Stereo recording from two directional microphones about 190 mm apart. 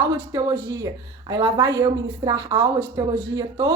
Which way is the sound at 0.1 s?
15° right (ahead or behind).